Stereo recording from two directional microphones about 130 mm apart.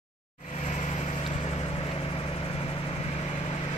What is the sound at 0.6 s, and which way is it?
Vehicle, 60° left (ahead or behind).